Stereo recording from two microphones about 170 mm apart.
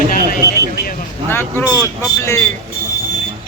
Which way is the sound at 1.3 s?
15° left (ahead or behind).